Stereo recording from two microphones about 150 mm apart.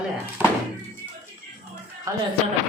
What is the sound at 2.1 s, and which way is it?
Speech, 25° right (ahead or behind).